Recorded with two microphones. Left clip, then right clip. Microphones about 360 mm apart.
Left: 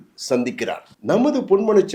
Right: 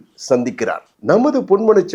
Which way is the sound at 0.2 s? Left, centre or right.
Right.